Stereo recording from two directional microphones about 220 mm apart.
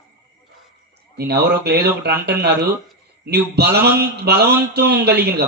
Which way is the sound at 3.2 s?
45° right (ahead or behind).